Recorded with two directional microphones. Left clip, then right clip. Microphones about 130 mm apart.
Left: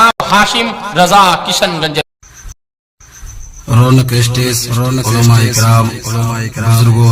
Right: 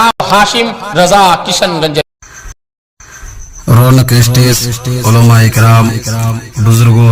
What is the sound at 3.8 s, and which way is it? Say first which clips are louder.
Speech: right 1 dB; 55° right (ahead or behind).